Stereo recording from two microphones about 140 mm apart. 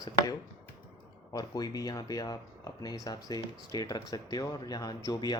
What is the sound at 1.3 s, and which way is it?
Speech, 25° left (ahead or behind).